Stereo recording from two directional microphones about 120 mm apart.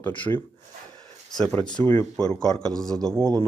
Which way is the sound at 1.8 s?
15° left (ahead or behind).